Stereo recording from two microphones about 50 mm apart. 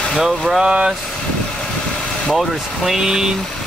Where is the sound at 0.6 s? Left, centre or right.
Centre.